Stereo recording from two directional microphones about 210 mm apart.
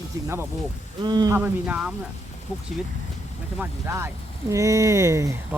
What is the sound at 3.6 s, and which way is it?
Speech, 10° right (ahead or behind).